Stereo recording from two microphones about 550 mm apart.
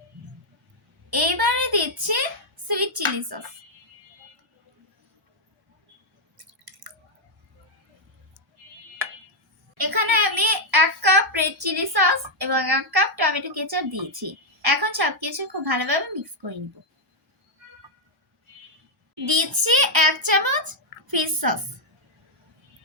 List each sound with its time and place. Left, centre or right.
1.1 s a woman's voice: right
9.7 s a woman's voice: right
19.2 s a woman's voice: right